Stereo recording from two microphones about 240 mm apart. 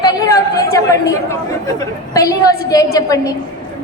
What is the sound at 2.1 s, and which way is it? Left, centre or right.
Speech, centre.